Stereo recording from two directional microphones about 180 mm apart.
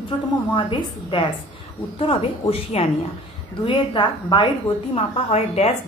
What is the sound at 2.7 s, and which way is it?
Speech, 35° left (ahead or behind).